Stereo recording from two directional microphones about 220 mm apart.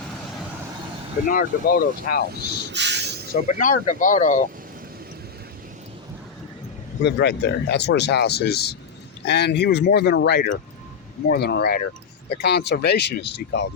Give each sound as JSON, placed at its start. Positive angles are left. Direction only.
{"t": 1.3, "sound": "speech", "side_deg": 40}
{"t": 2.3, "sound": "a sound", "side_deg": -50}
{"t": 3.3, "sound": "speech", "side_deg": 35}
{"t": 7.0, "sound": "speech", "side_deg": 50}